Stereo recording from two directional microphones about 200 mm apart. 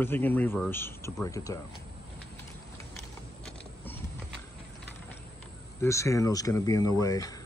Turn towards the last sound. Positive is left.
turn(degrees=15)  # may be behind; listen again after turning